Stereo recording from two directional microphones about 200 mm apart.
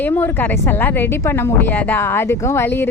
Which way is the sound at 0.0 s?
10° left (ahead or behind).